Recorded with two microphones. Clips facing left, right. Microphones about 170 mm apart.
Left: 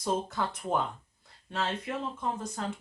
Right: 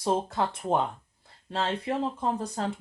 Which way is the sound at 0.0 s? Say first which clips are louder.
Right 4 dB; 30° right (ahead or behind).